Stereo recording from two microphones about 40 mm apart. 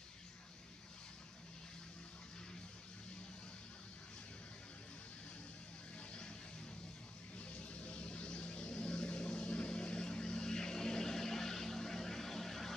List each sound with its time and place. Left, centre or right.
5.9 s vehicle: left
7.3 s vehicle: left; by 12.7 s centre